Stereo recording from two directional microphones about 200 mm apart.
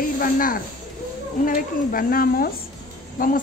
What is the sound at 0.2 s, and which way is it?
A woman's voice, 45° left (ahead or behind).